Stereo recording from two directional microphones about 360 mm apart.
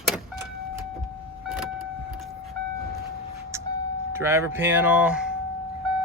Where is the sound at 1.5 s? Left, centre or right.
Centre.